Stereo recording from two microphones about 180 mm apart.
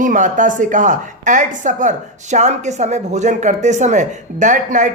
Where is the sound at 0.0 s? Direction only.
45° right (ahead or behind).